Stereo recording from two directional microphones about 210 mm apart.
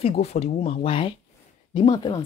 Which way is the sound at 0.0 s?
30° left (ahead or behind).